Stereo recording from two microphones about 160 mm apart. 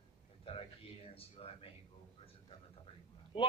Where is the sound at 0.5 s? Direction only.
35° left (ahead or behind).